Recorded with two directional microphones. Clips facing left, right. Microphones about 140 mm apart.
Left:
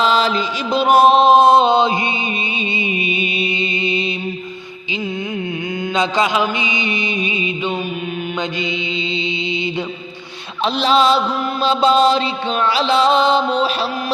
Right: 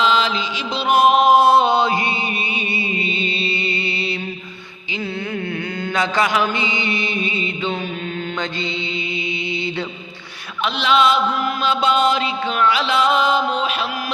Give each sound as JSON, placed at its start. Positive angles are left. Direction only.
{"t": 0.0, "sound": "music", "side_deg": 40}
{"t": 5.9, "sound": "mantra", "side_deg": 20}
{"t": 10.8, "sound": "mantra", "side_deg": 35}